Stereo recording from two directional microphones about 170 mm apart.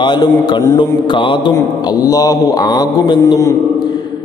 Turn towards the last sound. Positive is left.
turn(degrees=20)  # may be behind; listen again after turning